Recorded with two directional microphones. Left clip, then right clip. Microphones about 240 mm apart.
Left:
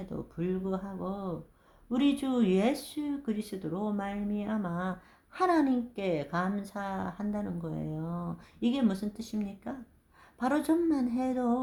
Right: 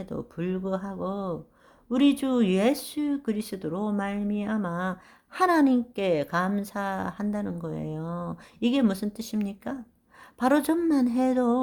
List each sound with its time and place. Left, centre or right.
0.0 s speech: right